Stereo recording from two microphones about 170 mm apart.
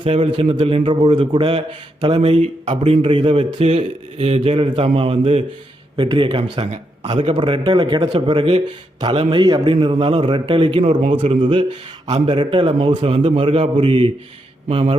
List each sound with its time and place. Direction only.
0.0 s a man's voice: 30° right (ahead or behind)